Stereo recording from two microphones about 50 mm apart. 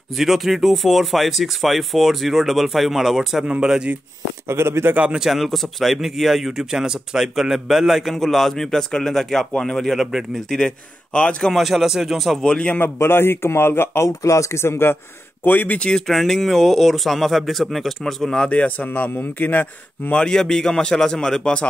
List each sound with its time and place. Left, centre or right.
0.1 s speech: centre
4.5 s a man's voice: right
5.1 s a man's voice: centre
9.8 s speech: centre
11.1 s a man's voice: left
11.5 s speech: centre
12.4 s a man's voice: centre
12.7 s a man's voice: left
14.0 s speech: left
15.4 s a man's voice: left
16.1 s speech: centre
18.5 s a man's voice: left
20.2 s a man's voice: centre